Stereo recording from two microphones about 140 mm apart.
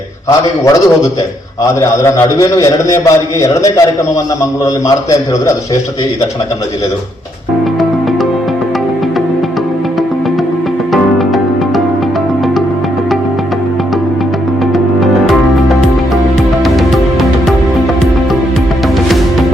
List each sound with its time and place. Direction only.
0.3 s a man's voice: 20° left (ahead or behind)
10.9 s music: centre (ahead or behind)
14.7 s music: centre (ahead or behind)
19.0 s music: centre (ahead or behind)